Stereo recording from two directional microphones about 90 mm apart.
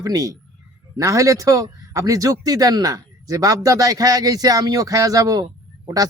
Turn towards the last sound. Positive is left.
turn(degrees=-45)  # may be behind; listen again after turning